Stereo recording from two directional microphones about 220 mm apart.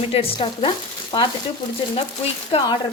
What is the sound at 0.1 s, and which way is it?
A woman's voice, 25° left (ahead or behind).